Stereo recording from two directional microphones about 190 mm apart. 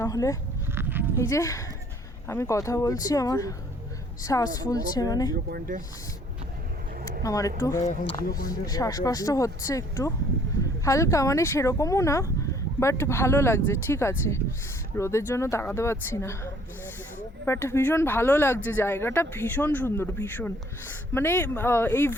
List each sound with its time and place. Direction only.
0.0 s speech: 15° left (ahead or behind)
0.8 s sheep: 10° right (ahead or behind)
1.1 s a woman's voice: 15° left (ahead or behind)
5.5 s speech: 50° right (ahead or behind)
7.2 s speech: 15° left (ahead or behind)